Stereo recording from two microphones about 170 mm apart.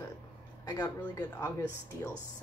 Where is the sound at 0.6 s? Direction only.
20° left (ahead or behind).